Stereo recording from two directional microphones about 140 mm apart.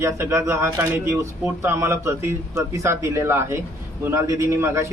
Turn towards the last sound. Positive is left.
turn(degrees=-20)  # may be behind; listen again after turning